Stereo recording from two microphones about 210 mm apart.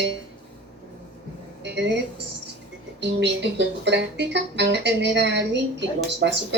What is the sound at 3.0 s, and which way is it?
Speech, 55° right (ahead or behind).